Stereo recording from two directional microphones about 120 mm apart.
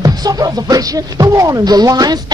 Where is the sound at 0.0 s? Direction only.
30° right (ahead or behind).